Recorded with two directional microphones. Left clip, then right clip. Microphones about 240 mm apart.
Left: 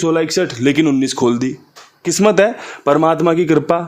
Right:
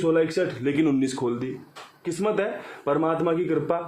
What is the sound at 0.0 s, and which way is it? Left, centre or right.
Speech, left.